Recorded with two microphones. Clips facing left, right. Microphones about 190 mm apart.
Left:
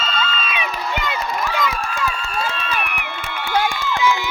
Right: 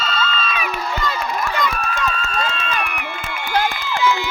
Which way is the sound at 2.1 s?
10° left (ahead or behind).